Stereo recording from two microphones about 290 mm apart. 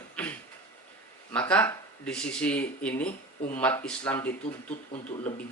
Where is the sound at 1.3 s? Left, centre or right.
Centre.